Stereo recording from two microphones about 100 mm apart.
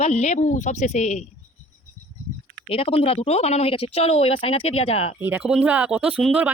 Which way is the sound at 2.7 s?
75° left (ahead or behind).